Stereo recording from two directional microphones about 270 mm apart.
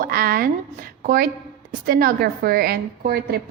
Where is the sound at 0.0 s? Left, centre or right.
Right.